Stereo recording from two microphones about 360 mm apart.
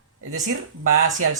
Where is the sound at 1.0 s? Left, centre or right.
Right.